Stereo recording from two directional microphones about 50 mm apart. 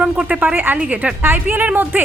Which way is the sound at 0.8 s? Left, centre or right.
Right.